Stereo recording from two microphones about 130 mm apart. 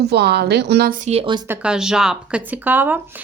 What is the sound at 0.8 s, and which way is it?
Speech, 90° right.